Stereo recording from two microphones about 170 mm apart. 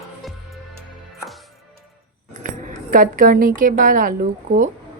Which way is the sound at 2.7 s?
55° right (ahead or behind).